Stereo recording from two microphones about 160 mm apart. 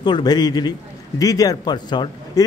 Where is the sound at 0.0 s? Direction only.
25° left (ahead or behind).